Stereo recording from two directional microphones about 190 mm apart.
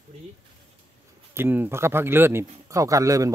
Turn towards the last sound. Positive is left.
turn(degrees=-15)  # may be behind; listen again after turning